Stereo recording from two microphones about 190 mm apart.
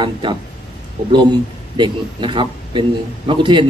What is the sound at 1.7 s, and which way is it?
A man's voice, 25° right (ahead or behind).